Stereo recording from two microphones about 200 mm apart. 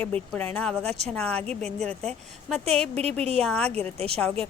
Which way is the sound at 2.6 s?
30° right (ahead or behind).